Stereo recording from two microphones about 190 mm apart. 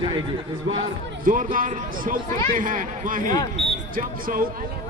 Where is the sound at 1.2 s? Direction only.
45° right (ahead or behind).